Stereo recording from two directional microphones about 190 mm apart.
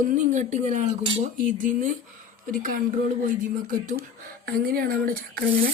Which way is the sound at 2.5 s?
45° right (ahead or behind).